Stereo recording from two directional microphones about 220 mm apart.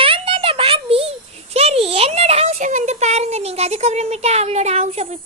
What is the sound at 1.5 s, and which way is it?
A child's voice, 25° right (ahead or behind).